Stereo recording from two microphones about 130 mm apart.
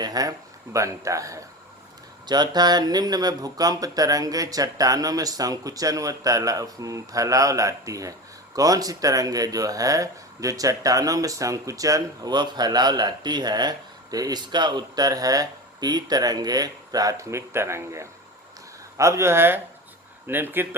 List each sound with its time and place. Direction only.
0.0 s speech: 30° right (ahead or behind)